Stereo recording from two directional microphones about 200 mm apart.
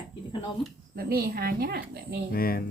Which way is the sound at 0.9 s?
50° right (ahead or behind).